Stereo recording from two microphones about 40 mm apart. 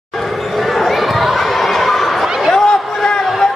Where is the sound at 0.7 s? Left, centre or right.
Centre.